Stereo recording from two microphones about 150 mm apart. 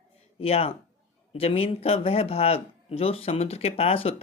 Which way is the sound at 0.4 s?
40° left (ahead or behind).